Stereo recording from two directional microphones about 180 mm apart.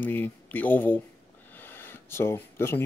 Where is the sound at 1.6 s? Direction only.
10° left (ahead or behind).